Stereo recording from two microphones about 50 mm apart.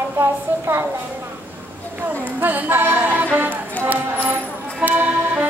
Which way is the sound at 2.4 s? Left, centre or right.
Right.